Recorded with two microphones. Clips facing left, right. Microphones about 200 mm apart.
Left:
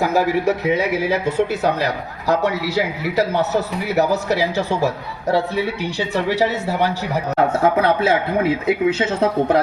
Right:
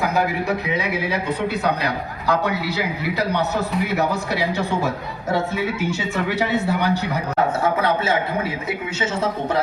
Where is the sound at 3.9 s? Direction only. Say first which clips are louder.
Left 4 dB; 40° left (ahead or behind).